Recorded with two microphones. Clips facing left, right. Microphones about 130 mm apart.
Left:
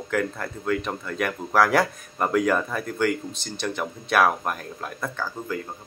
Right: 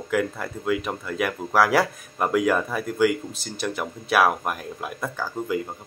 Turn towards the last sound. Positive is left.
turn(degrees=-10)  # may be behind; listen again after turning